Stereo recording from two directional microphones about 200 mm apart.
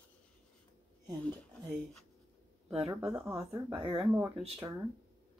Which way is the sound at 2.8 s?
15° right (ahead or behind).